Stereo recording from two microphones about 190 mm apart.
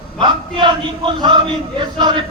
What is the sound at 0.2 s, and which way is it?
Speech, 25° right (ahead or behind).